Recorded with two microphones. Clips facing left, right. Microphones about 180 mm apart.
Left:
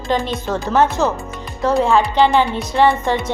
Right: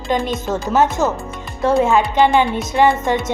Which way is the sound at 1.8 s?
20° right (ahead or behind).